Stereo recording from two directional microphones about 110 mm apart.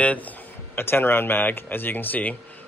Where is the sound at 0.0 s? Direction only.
10° left (ahead or behind).